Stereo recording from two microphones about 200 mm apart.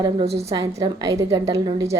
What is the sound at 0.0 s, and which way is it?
Speech, 30° right (ahead or behind).